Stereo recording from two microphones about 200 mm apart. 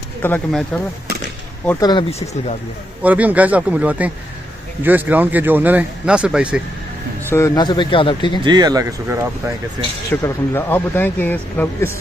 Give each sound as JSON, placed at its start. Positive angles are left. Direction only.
{"t": 0.2, "sound": "speech", "side_deg": 5}
{"t": 1.7, "sound": "a man's voice", "side_deg": 20}
{"t": 3.0, "sound": "a man's voice", "side_deg": -10}
{"t": 7.2, "sound": "a man's voice", "side_deg": 15}
{"t": 8.5, "sound": "speech", "side_deg": -20}
{"t": 10.2, "sound": "speech", "side_deg": 10}